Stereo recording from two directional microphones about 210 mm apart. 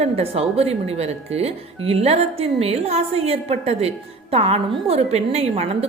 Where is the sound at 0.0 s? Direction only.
30° right (ahead or behind).